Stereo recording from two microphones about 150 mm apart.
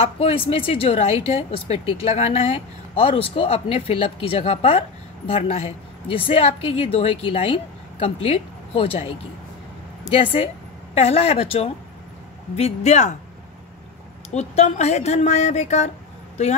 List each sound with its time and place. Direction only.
0.0 s speech: 40° left (ahead or behind)
14.3 s speech: 45° left (ahead or behind)